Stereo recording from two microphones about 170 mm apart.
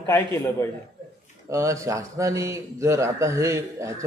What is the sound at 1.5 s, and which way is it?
Speech, 15° right (ahead or behind).